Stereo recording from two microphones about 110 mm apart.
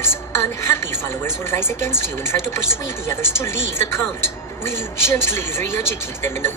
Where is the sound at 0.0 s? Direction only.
20° left (ahead or behind).